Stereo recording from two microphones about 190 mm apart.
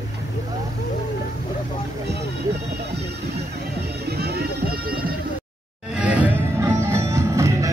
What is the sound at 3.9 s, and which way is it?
Music, 55° right (ahead or behind).